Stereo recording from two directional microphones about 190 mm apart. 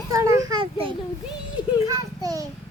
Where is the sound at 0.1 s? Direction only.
15° right (ahead or behind).